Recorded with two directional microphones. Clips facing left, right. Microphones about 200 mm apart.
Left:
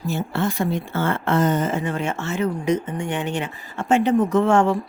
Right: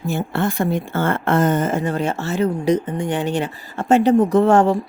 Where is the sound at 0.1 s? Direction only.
55° right (ahead or behind).